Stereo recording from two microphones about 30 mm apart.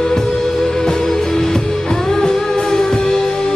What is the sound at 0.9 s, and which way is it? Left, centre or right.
Music, centre.